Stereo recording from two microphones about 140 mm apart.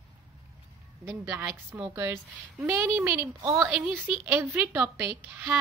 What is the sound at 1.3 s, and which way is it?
A woman's voice, 15° right (ahead or behind).